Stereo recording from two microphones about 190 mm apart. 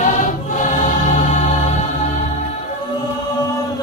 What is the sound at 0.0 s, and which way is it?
Music, 40° left (ahead or behind).